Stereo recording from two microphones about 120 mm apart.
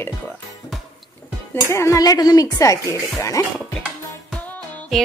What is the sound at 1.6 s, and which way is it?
Speech, 25° left (ahead or behind).